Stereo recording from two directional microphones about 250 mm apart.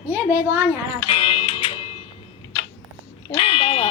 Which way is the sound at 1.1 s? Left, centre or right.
Left.